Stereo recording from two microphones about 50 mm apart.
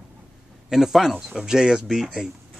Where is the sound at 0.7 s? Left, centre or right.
Centre.